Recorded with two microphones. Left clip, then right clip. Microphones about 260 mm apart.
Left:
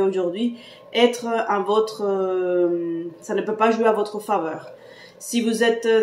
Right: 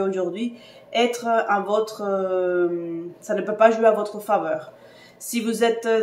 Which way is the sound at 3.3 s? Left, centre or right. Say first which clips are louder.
Right 3 dB; centre.